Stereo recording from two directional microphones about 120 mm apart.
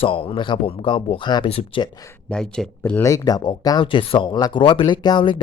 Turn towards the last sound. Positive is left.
turn(degrees=40)  # may be behind; listen again after turning